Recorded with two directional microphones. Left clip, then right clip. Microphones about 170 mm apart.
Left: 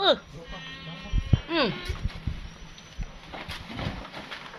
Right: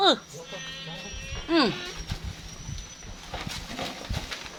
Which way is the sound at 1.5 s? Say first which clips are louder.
Right 3 dB; 25° right (ahead or behind).